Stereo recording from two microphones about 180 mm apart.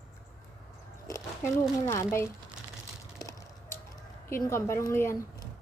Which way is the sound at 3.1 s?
20° left (ahead or behind).